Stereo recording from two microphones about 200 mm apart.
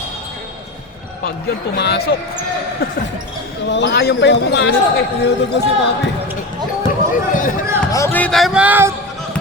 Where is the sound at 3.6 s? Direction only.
60° left (ahead or behind).